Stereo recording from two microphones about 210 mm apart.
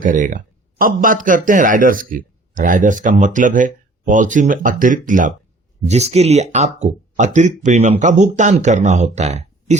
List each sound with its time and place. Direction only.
0.0 s speech: 40° right (ahead or behind)